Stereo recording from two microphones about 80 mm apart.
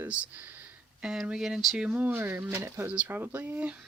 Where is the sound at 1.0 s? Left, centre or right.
Centre.